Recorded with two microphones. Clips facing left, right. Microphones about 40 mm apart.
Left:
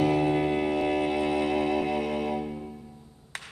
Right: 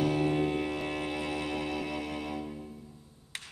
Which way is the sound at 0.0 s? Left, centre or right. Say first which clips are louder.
Left 4 dB; left.